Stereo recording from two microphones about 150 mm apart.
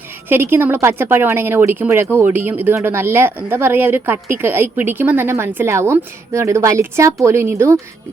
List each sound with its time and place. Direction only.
0.5 s speech: 15° right (ahead or behind)